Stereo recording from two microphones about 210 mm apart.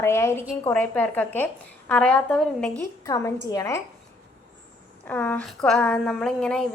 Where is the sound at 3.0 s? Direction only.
15° left (ahead or behind).